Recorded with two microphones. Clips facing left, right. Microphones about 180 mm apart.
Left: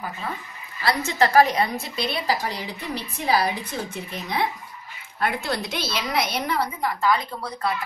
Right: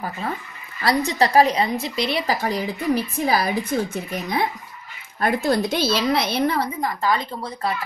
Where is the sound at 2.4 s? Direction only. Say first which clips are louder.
Right 8 dB; 45° right (ahead or behind).